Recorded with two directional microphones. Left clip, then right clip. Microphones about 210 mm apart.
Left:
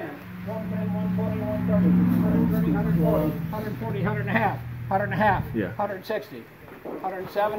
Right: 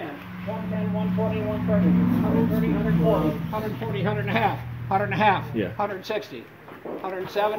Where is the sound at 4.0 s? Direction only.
35° left (ahead or behind).